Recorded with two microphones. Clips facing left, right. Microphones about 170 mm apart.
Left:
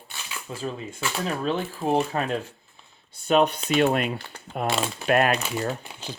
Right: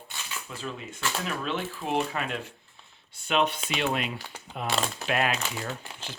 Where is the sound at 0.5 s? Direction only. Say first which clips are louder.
Left 7 dB; 35° left (ahead or behind); by 4.2 s 55° left (ahead or behind).